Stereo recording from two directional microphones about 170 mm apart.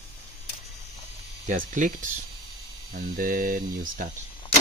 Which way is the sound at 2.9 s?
55° right (ahead or behind).